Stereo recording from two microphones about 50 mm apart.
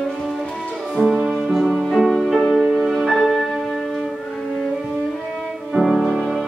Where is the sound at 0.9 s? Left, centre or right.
Centre.